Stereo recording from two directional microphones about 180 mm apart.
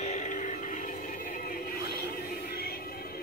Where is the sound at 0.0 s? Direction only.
40° left (ahead or behind).